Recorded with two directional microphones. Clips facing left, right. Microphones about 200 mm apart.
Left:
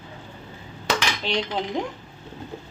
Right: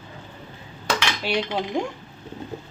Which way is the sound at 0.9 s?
10° right (ahead or behind).